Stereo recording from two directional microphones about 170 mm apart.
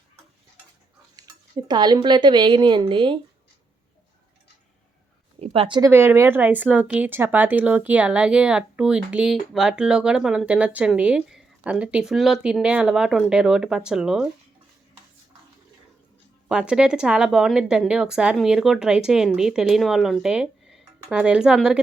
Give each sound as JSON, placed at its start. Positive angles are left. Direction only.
{"t": 1.6, "sound": "a woman's voice", "side_deg": -25}
{"t": 5.4, "sound": "speech", "side_deg": -30}
{"t": 5.9, "sound": "speech", "side_deg": -15}
{"t": 16.5, "sound": "speech", "side_deg": -5}